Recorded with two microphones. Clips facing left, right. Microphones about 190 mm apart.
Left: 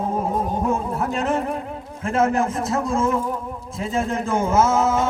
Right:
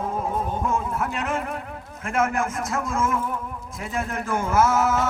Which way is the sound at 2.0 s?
30° left (ahead or behind).